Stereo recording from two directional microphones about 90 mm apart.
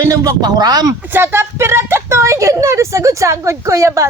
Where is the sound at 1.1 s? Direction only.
25° right (ahead or behind).